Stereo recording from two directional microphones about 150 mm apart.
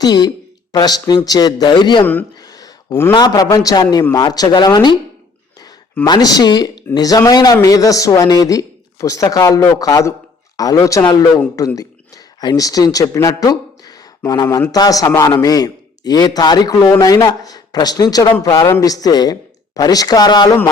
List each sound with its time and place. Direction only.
0.0 s a man's voice: 25° left (ahead or behind)
2.4 s a sound: 25° left (ahead or behind)
3.2 s a man's voice: 25° left (ahead or behind)
6.1 s a man's voice: 25° left (ahead or behind)